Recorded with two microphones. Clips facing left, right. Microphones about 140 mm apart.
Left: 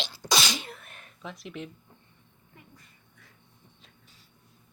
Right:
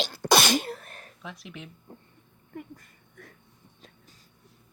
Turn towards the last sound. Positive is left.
turn(degrees=-55)  # may be behind; listen again after turning